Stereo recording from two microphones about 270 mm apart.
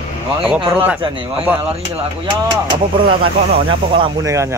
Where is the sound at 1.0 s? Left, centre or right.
Centre.